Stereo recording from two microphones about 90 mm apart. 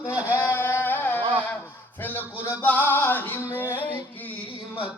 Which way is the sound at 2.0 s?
20° left (ahead or behind).